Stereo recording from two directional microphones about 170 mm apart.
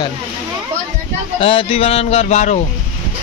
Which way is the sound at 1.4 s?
35° left (ahead or behind).